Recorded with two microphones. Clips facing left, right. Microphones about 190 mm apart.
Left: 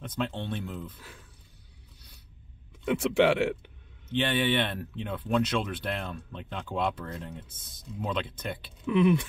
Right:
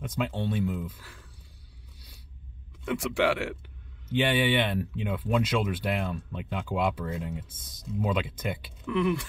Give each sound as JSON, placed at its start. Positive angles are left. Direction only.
{"t": 0.0, "sound": "speech", "side_deg": -10}
{"t": 2.8, "sound": "speech", "side_deg": 25}
{"t": 4.1, "sound": "speech", "side_deg": -10}
{"t": 8.8, "sound": "speech", "side_deg": 20}